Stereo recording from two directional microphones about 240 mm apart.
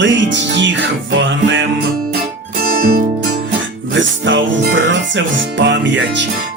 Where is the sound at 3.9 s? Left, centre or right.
Right.